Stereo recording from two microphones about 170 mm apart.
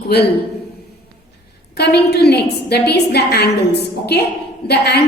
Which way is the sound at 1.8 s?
75° left (ahead or behind).